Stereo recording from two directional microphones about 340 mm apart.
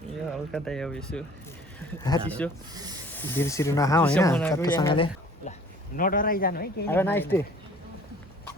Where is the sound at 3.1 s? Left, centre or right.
Centre; by 6.9 s left.